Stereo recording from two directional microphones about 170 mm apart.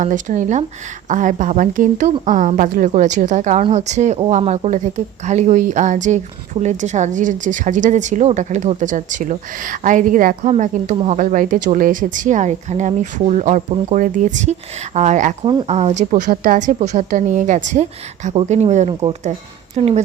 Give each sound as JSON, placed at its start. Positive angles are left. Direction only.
{"t": 0.0, "sound": "a woman's voice", "side_deg": -50}
{"t": 10.5, "sound": "a woman's voice", "side_deg": -40}